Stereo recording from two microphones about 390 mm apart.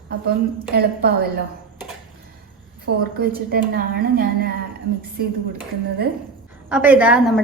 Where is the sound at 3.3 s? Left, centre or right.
Right.